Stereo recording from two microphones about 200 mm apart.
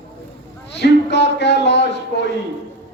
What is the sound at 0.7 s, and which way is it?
A man's voice, 60° left (ahead or behind).